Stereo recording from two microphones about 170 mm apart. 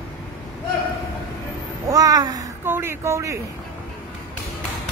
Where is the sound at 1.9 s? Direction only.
20° right (ahead or behind).